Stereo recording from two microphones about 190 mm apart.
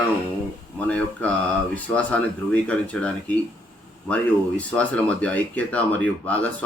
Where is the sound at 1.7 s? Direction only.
5° left (ahead or behind).